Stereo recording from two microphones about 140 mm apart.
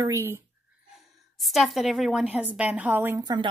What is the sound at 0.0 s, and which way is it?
Speech, 20° right (ahead or behind).